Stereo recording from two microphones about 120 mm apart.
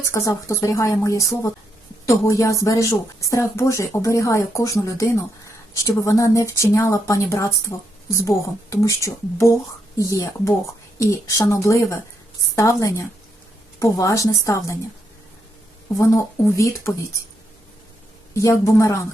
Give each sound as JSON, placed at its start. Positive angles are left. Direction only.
{"t": 0.0, "sound": "speech", "side_deg": 25}
{"t": 16.0, "sound": "speech", "side_deg": 25}
{"t": 18.3, "sound": "speech", "side_deg": 25}